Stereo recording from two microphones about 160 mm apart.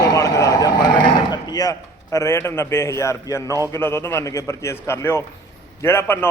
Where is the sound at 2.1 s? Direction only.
15° left (ahead or behind).